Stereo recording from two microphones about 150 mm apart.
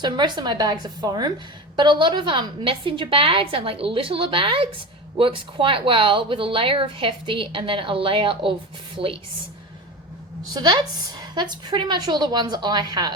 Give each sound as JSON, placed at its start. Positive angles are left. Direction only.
{"t": 0.0, "sound": "a woman's voice", "side_deg": -30}
{"t": 10.5, "sound": "a woman's voice", "side_deg": -30}